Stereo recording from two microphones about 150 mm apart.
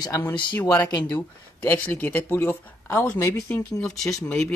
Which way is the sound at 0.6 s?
25° left (ahead or behind).